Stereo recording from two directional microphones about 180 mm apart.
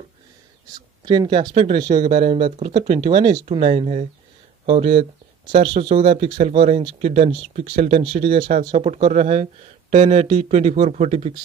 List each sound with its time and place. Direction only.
1.0 s speech: 25° right (ahead or behind)